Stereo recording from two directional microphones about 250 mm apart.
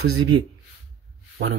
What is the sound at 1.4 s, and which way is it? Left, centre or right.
Speech, right.